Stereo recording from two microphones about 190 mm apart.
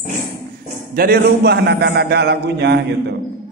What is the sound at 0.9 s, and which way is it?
A man's voice, 50° right (ahead or behind).